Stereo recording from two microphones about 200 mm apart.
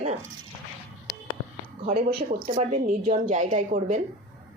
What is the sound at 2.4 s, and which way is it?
A woman's voice, 35° right (ahead or behind).